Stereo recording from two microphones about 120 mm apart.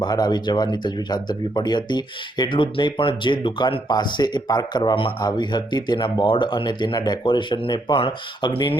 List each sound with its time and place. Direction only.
0.0 s speech: 35° left (ahead or behind)